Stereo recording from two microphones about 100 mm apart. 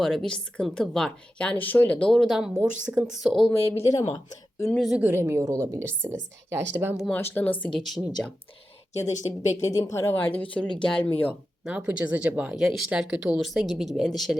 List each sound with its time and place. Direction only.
0.0 s a woman's voice: 5° left (ahead or behind)
2.8 s speech: 15° right (ahead or behind)
3.1 s speech: centre (ahead or behind)
3.5 s a woman's voice: 25° left (ahead or behind)
4.7 s speech: centre (ahead or behind)
4.9 s speech: 15° right (ahead or behind)
5.2 s speech: 30° right (ahead or behind)
7.1 s a woman's voice: 20° left (ahead or behind)
7.7 s speech: centre (ahead or behind)
9.2 s speech: 50° left (ahead or behind)
9.6 s a woman's voice: 35° left (ahead or behind); by 11.3 s 20° left (ahead or behind)
11.6 s speech: 10° right (ahead or behind)